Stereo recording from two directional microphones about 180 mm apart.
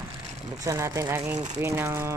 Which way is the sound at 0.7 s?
15° right (ahead or behind).